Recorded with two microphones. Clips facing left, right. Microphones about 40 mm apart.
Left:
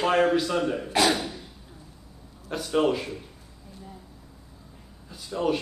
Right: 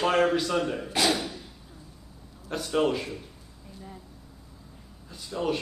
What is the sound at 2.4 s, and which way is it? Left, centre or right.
Speech, centre.